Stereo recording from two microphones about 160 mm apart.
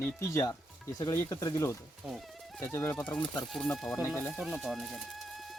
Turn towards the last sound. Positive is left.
turn(degrees=0)  # may be behind; listen again after turning